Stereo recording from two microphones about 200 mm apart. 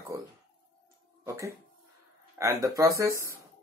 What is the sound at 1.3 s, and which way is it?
Speech, 15° right (ahead or behind).